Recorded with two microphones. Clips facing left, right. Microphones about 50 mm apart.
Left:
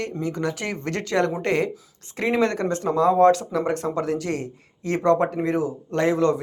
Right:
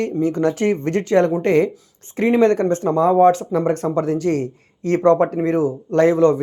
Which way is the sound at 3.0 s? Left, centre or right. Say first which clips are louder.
Right 3 dB; right.